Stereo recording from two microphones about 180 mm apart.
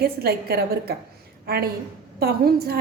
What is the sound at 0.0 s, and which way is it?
A woman's voice, 60° right (ahead or behind).